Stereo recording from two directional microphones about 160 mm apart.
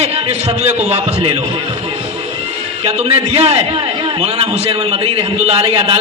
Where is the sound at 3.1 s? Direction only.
40° right (ahead or behind).